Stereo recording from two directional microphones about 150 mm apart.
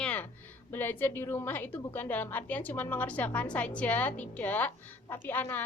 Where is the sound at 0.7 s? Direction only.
15° left (ahead or behind).